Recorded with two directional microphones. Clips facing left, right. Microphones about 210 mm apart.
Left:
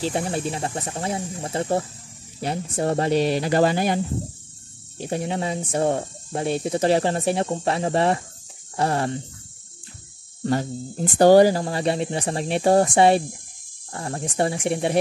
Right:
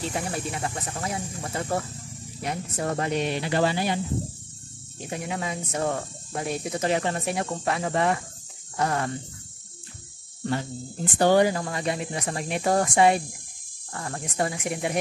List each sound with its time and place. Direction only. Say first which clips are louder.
0.0 s speech: left 5 dB; 30° left (ahead or behind); by 4.0 s 45° left (ahead or behind)
5.0 s speech: left 5 dB; 30° left (ahead or behind)
10.4 s speech: left 5 dB; 40° left (ahead or behind)